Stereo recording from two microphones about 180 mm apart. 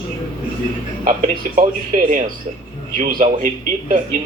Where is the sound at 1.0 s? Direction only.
45° right (ahead or behind).